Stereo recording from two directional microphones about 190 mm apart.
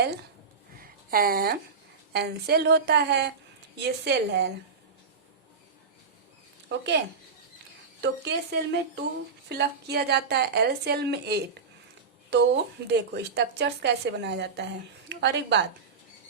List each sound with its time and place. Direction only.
0.8 s a sound: 50° right (ahead or behind)
2.1 s a woman's voice: 60° right (ahead or behind)
6.7 s a woman's voice: 65° right (ahead or behind)
8.0 s a woman's voice: 60° right (ahead or behind)